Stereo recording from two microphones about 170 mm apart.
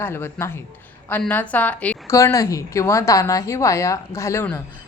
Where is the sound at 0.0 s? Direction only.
15° left (ahead or behind).